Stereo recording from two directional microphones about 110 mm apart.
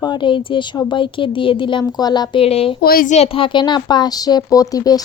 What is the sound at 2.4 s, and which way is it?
A woman's voice, 60° left (ahead or behind).